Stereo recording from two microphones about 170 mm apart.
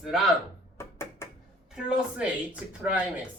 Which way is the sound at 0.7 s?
15° left (ahead or behind).